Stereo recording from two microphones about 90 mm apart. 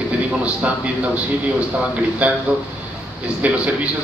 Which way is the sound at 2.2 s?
15° right (ahead or behind).